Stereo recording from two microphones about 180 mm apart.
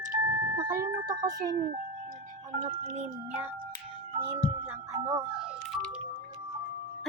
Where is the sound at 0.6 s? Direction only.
25° right (ahead or behind).